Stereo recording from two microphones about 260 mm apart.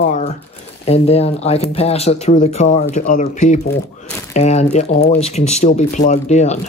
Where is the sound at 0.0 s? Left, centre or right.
Left.